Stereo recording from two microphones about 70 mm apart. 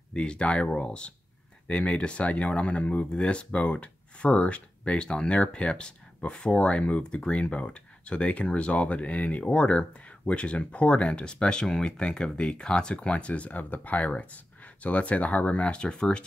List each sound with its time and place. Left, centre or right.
0.1 s speech: centre